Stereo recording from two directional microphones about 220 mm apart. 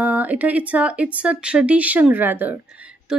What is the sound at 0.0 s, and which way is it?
Speech, 5° right (ahead or behind).